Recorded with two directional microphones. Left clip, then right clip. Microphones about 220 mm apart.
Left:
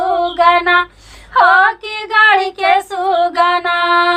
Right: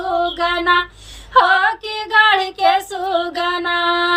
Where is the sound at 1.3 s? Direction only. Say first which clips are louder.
Left 3 dB; 10° right (ahead or behind).